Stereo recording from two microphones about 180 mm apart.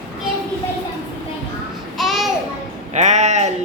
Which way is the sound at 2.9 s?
40° right (ahead or behind).